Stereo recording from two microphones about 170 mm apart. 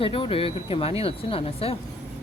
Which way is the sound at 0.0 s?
30° left (ahead or behind).